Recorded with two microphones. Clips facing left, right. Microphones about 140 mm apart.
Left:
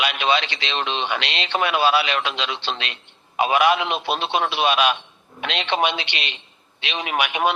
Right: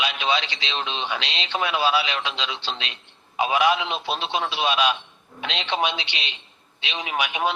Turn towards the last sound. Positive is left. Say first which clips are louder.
# left 3 dB
turn(degrees=65)  # may be behind; listen again after turning